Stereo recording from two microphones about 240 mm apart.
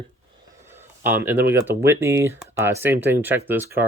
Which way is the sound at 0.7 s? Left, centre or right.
Centre.